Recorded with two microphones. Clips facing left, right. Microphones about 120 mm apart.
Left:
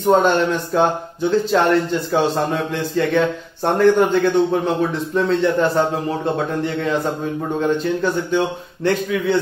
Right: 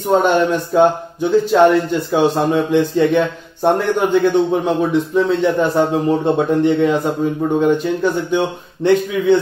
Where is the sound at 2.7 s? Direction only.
15° right (ahead or behind).